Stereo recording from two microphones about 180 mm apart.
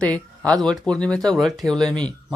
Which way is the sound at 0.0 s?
5° left (ahead or behind).